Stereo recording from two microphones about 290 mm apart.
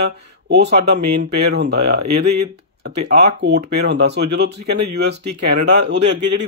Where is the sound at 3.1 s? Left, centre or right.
Right.